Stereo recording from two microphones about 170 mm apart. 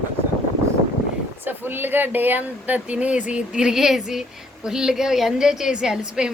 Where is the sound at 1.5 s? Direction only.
10° right (ahead or behind).